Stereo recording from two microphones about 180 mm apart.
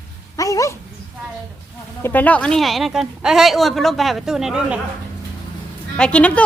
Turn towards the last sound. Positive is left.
turn(degrees=5)  # may be behind; listen again after turning